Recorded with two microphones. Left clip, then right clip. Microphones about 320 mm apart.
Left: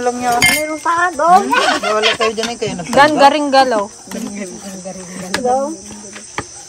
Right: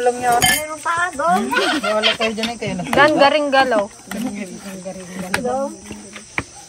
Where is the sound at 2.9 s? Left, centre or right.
Centre.